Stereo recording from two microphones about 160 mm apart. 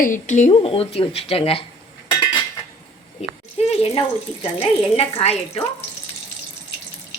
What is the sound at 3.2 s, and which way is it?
Speech, 40° left (ahead or behind).